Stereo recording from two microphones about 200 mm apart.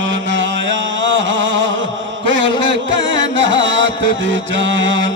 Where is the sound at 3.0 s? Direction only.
70° right (ahead or behind).